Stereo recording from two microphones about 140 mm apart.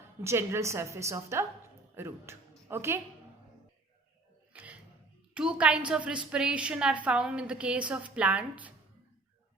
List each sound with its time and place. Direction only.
0.2 s a woman's voice: 15° right (ahead or behind)
4.5 s music: 10° right (ahead or behind)
5.3 s a woman's voice: 5° right (ahead or behind)